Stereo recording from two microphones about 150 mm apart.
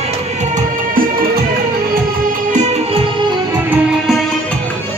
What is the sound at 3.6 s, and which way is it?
Music, centre (ahead or behind).